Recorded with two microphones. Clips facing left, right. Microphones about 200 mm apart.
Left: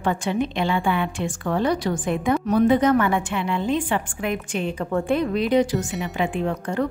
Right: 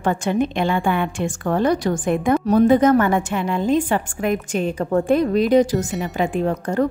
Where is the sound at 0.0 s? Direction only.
45° right (ahead or behind).